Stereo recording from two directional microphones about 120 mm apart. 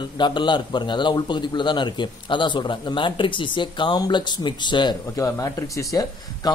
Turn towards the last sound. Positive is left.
turn(degrees=30)  # may be behind; listen again after turning